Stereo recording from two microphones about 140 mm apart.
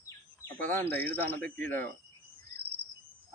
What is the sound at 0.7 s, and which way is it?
Speech, 15° left (ahead or behind).